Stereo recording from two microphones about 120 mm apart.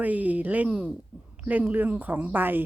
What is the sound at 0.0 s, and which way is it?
Speech, 10° right (ahead or behind).